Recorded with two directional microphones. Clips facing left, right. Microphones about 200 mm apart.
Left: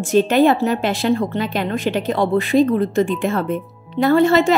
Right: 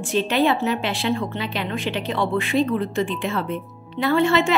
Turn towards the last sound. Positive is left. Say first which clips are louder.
# left 5 dB
turn(degrees=40)  # may be behind; listen again after turning